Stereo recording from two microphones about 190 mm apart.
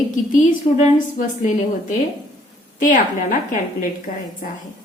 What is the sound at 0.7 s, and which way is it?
Speech, 25° left (ahead or behind).